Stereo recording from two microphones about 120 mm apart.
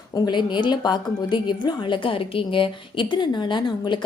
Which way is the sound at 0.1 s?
40° left (ahead or behind).